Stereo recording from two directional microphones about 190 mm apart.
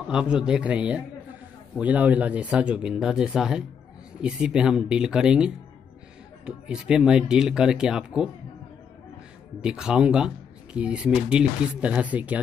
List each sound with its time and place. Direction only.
0.1 s speech: 5° right (ahead or behind)
9.6 s speech: 5° right (ahead or behind)